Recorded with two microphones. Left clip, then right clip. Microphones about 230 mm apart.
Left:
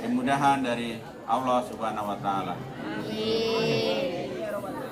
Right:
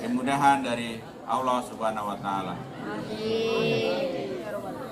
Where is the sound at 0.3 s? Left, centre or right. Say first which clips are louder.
Right 2 dB; right.